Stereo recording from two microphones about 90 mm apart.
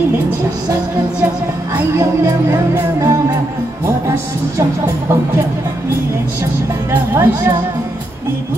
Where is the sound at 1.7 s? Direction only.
30° right (ahead or behind).